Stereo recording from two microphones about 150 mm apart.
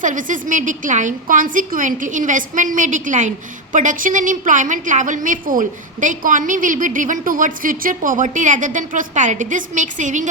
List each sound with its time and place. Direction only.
0.0 s a woman's voice: 60° right (ahead or behind)